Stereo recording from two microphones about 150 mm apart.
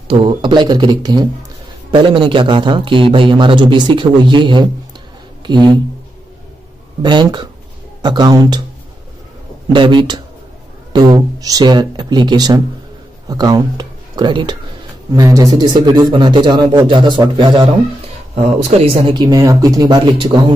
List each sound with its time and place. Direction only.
0.1 s a man's voice: 35° right (ahead or behind)
7.0 s a man's voice: 30° right (ahead or behind)
9.7 s a man's voice: 30° right (ahead or behind)
18.3 s a man's voice: 45° right (ahead or behind)